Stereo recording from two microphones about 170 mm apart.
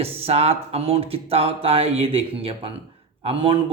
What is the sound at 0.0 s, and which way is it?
Speech, 35° right (ahead or behind).